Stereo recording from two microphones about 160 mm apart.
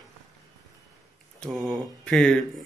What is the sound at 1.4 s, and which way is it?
Speech, centre (ahead or behind).